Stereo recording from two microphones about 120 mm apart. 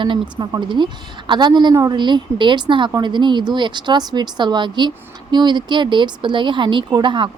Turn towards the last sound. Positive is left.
turn(degrees=-40)  # may be behind; listen again after turning